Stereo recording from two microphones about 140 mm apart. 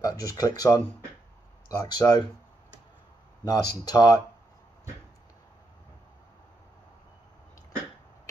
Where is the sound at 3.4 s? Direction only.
25° left (ahead or behind).